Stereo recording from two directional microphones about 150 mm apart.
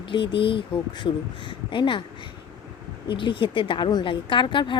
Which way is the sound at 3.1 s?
35° left (ahead or behind).